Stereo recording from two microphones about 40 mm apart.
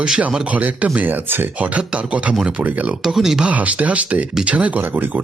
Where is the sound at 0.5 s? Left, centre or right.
Right.